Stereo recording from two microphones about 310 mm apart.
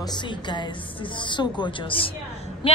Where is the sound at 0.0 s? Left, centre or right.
Centre.